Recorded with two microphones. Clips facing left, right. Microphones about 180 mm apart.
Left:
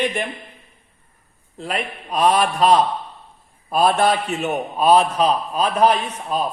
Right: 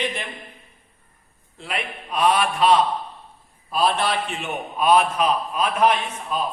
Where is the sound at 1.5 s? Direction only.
40° left (ahead or behind).